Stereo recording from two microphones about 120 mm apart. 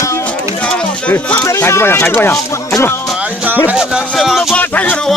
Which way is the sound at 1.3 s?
25° left (ahead or behind).